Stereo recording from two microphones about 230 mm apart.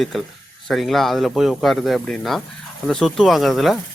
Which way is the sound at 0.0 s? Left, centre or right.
Centre.